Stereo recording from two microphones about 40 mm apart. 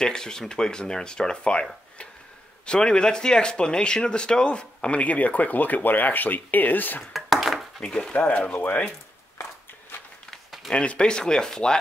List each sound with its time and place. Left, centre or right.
0.0 s speech: centre; by 7.0 s left
7.0 s a sound: centre
7.8 s speech: left
8.1 s speech: left
10.7 s speech: left